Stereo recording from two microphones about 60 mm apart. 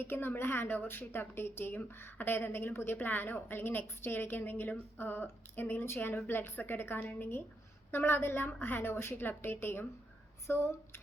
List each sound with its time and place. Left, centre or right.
0.0 s a woman's voice: left